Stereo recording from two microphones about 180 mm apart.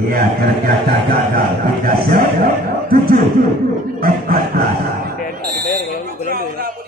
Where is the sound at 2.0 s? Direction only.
55° right (ahead or behind).